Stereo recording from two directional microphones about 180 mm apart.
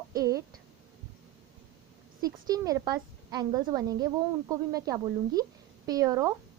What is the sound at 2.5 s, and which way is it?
A woman's voice, 20° right (ahead or behind).